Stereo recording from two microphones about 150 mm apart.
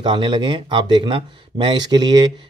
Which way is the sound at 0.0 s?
30° right (ahead or behind).